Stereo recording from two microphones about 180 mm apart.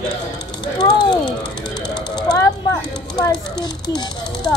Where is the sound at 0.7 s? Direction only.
25° left (ahead or behind).